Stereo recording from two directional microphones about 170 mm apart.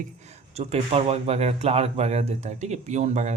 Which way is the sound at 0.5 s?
35° right (ahead or behind).